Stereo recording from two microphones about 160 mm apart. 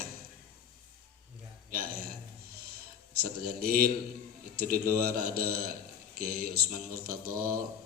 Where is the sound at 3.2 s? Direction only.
75° right (ahead or behind).